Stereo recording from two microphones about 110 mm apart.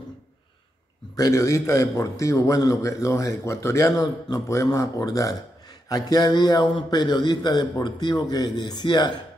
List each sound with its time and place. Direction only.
1.1 s a man's voice: 30° left (ahead or behind)